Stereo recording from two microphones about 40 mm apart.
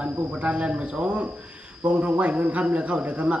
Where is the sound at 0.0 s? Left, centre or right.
Right.